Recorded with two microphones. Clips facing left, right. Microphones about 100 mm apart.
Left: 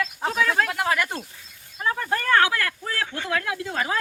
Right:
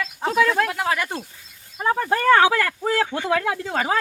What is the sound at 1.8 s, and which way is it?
Speech, 45° right (ahead or behind).